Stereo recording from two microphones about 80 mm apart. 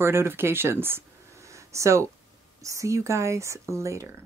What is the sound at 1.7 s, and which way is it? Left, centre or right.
Speech, right.